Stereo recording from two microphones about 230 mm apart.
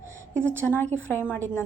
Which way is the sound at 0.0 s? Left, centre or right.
Left.